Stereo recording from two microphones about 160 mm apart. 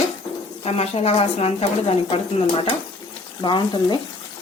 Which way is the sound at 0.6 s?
40° left (ahead or behind).